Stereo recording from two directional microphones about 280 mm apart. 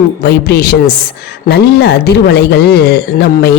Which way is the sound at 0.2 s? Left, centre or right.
Left.